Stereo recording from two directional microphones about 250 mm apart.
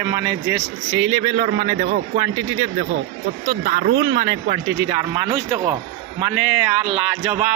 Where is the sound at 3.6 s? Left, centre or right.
Right.